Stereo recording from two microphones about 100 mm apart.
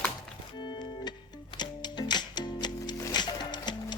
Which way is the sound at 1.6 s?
45° left (ahead or behind).